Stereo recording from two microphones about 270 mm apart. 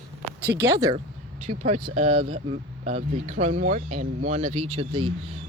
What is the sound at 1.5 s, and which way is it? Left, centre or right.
Speech, right.